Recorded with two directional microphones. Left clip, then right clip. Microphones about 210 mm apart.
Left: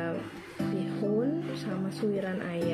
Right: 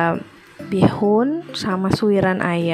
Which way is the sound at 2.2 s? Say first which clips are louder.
Right 15 dB; 50° right (ahead or behind).